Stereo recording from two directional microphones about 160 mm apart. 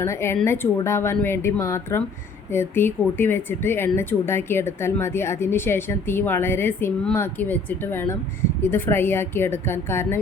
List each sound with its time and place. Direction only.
0.0 s speech: 15° left (ahead or behind)